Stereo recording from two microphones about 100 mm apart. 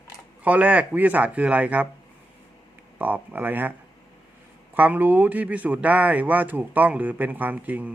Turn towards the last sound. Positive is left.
turn(degrees=-15)  # may be behind; listen again after turning